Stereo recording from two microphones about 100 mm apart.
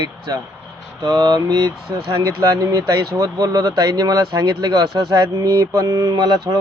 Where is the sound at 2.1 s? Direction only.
30° right (ahead or behind).